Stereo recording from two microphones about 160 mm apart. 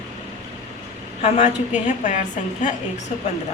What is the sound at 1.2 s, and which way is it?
A woman's voice, 45° left (ahead or behind).